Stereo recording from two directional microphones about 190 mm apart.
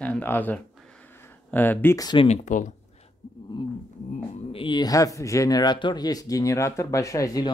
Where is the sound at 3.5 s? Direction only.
25° left (ahead or behind).